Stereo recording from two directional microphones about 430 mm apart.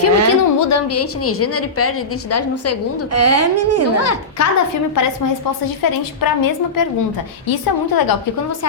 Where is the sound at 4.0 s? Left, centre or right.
Left.